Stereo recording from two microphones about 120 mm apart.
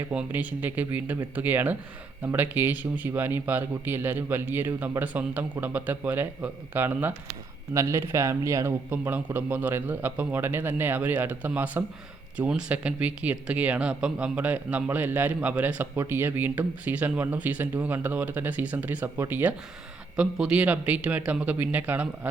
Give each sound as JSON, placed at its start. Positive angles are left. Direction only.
{"t": 0.1, "sound": "speech", "side_deg": -10}